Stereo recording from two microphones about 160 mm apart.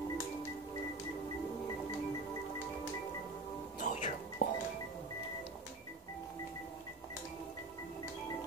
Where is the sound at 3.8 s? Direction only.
50° left (ahead or behind).